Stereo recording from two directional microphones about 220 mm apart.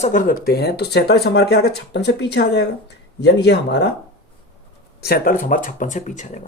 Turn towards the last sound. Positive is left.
turn(degrees=35)  # may be behind; listen again after turning